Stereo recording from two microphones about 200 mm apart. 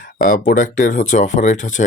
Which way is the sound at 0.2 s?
40° left (ahead or behind).